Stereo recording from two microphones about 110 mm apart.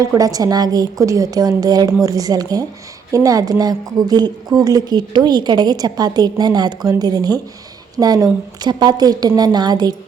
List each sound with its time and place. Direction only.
0.0 s a woman's voice: 35° right (ahead or behind)